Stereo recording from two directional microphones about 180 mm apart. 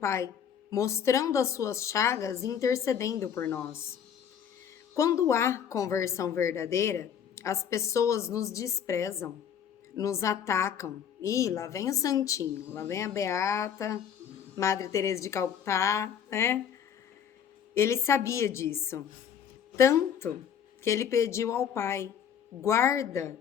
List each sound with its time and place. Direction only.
0.0 s a woman's voice: 15° left (ahead or behind)
4.9 s a woman's voice: 20° left (ahead or behind)
17.7 s a woman's voice: 15° left (ahead or behind)